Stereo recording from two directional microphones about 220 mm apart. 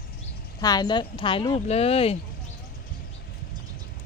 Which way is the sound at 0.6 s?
15° left (ahead or behind).